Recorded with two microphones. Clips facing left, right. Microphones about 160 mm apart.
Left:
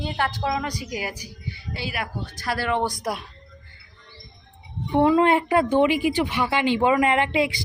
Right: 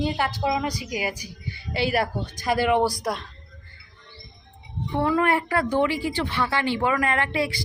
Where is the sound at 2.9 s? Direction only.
Centre (ahead or behind).